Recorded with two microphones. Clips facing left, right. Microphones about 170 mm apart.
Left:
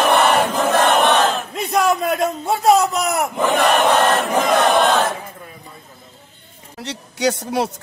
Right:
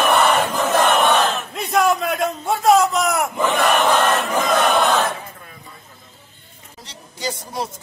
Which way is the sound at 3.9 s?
35° left (ahead or behind).